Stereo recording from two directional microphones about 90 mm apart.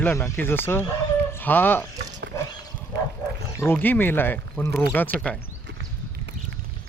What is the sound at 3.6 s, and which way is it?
Speech, 20° left (ahead or behind).